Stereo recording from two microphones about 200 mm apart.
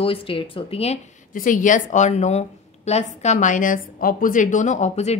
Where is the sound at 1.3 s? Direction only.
40° left (ahead or behind).